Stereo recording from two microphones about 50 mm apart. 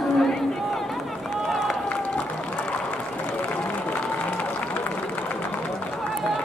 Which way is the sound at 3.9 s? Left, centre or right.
Left.